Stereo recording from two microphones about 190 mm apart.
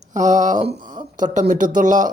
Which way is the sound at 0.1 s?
40° right (ahead or behind).